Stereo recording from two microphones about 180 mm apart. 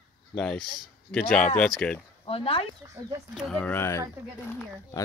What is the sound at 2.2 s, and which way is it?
Speech, 30° left (ahead or behind).